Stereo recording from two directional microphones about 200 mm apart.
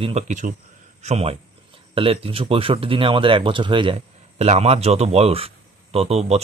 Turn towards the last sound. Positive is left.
turn(degrees=-30)  # may be behind; listen again after turning